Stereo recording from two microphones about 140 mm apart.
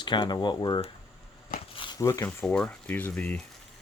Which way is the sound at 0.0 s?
35° left (ahead or behind).